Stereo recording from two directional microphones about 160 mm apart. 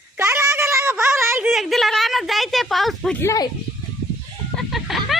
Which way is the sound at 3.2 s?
20° left (ahead or behind).